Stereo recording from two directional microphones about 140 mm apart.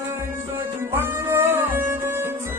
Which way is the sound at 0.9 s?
20° right (ahead or behind).